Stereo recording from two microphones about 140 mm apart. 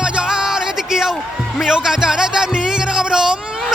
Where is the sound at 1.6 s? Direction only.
5° right (ahead or behind).